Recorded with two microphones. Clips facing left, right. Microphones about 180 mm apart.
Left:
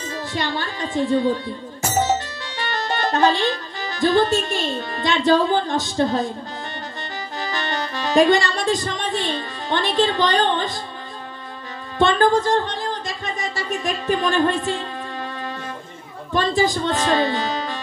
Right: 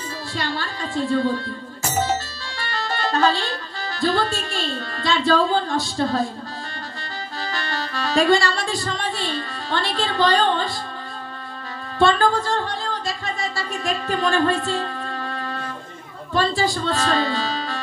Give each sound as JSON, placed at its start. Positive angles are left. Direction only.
{"t": 0.3, "sound": "a woman's voice", "side_deg": 20}
{"t": 2.5, "sound": "speech", "side_deg": 20}
{"t": 7.4, "sound": "music", "side_deg": 20}
{"t": 12.0, "sound": "music", "side_deg": 20}
{"t": 16.3, "sound": "speech", "side_deg": 20}